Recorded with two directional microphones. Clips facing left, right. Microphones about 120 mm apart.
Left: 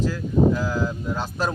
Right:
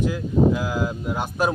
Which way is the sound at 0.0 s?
15° right (ahead or behind).